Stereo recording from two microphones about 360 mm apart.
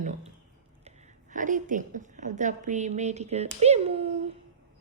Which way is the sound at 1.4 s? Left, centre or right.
Right.